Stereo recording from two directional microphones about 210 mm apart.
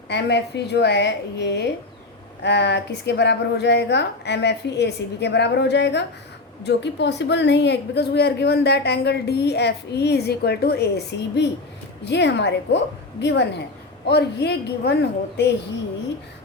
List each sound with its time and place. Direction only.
0.1 s a woman's voice: 55° left (ahead or behind)